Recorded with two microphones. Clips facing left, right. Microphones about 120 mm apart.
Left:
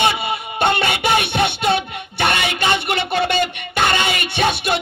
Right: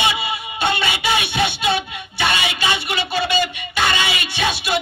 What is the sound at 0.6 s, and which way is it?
Music, 55° left (ahead or behind).